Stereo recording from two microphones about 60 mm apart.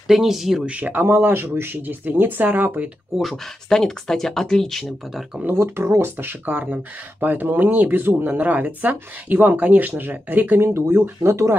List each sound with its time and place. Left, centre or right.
0.1 s speech: centre
0.7 s speech: right
1.0 s speech: right
3.6 s speech: centre
5.5 s speech: right
11.2 s speech: right